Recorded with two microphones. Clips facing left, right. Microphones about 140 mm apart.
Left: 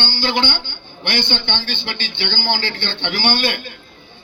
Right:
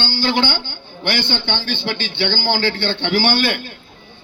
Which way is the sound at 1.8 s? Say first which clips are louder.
Right 5 dB; 40° right (ahead or behind).